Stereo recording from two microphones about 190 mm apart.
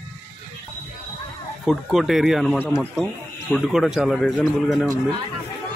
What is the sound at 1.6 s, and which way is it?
Speech, centre (ahead or behind).